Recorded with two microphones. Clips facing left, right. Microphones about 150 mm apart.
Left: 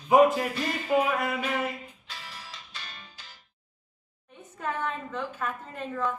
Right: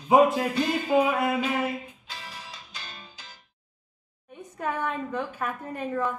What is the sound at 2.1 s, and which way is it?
Music, 20° right (ahead or behind).